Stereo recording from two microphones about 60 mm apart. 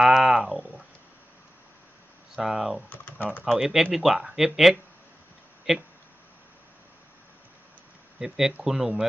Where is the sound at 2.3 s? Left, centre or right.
Centre.